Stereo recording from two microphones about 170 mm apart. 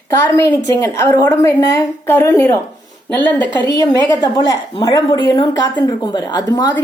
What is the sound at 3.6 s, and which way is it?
A woman's voice, 20° left (ahead or behind).